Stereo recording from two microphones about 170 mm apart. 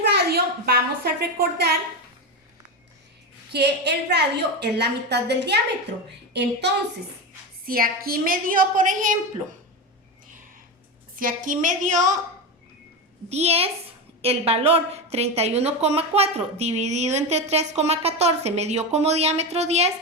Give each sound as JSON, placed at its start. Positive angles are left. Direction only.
{"t": 0.1, "sound": "a sound", "side_deg": -75}
{"t": 1.2, "sound": "a woman's voice", "side_deg": -70}
{"t": 3.5, "sound": "a woman's voice", "side_deg": -80}
{"t": 7.6, "sound": "a woman's voice", "side_deg": -60}
{"t": 11.2, "sound": "a woman's voice", "side_deg": -50}
{"t": 13.3, "sound": "a woman's voice", "side_deg": -35}